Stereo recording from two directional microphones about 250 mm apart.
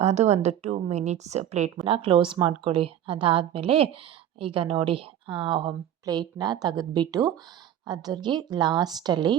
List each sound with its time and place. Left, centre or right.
0.0 s a woman's voice: right